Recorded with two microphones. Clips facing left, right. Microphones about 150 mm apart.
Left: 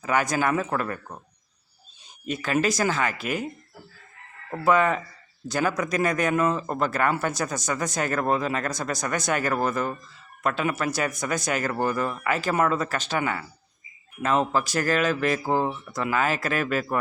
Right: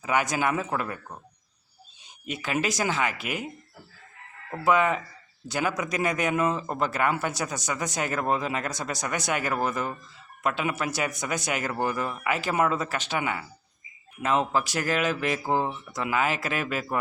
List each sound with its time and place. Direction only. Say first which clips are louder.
0.0 s a man's voice: left 2 dB; 15° right (ahead or behind)
2.2 s a man's voice: left 4 dB; 15° right (ahead or behind)
4.6 s a man's voice: left 2 dB; 15° right (ahead or behind)